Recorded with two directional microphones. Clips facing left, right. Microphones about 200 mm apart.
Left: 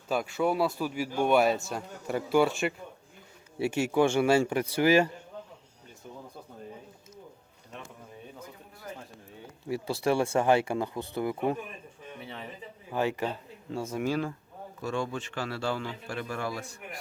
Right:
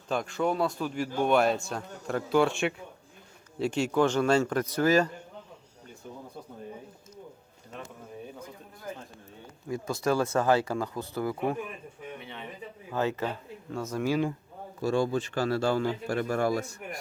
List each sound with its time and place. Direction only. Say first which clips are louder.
0.1 s a man's voice: left 1 dB; 5° left (ahead or behind)
9.6 s speech: even; 30° left (ahead or behind)
12.2 s a sound: left 1 dB; 35° left (ahead or behind)
12.9 s speech: even; 15° left (ahead or behind)
14.0 s speech: right 3 dB; 15° right (ahead or behind)
14.8 s speech: right 6 dB; 35° right (ahead or behind)